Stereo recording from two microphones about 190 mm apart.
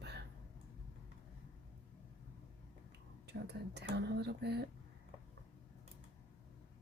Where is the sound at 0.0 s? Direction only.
60° right (ahead or behind).